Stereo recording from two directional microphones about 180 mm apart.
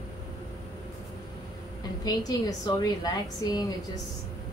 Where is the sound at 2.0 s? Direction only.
20° left (ahead or behind).